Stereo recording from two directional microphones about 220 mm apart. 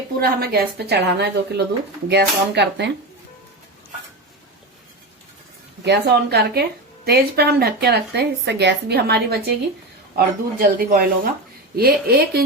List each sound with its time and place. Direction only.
0.2 s a woman's voice: 45° right (ahead or behind)
5.8 s a woman's voice: 50° right (ahead or behind)